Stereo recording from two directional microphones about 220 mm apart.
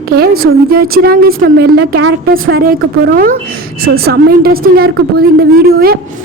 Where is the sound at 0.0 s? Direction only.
45° right (ahead or behind).